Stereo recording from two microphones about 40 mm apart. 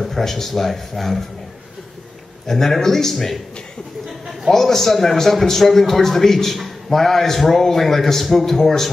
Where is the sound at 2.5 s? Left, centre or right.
Centre.